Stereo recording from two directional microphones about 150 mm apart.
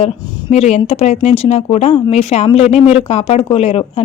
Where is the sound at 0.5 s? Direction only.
45° left (ahead or behind).